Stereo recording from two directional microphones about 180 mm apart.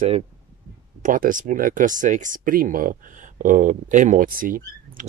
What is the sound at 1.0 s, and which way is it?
Speech, 50° right (ahead or behind).